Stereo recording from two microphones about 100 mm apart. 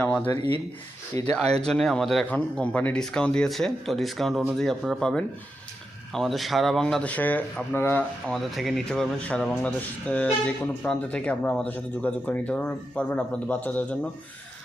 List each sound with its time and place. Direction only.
0.0 s speech: 15° left (ahead or behind)
8.3 s speech: 5° left (ahead or behind)